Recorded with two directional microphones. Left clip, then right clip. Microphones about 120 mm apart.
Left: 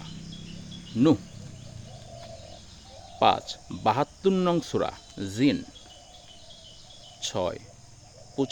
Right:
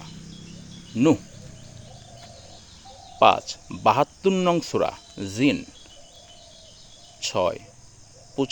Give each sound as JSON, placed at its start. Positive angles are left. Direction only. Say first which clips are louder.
{"t": 0.9, "sound": "speech", "louder": "right 2 dB", "side_deg": -10}
{"t": 3.2, "sound": "speech", "louder": "right 5 dB", "side_deg": -20}
{"t": 7.2, "sound": "speech", "louder": "right 6 dB", "side_deg": -20}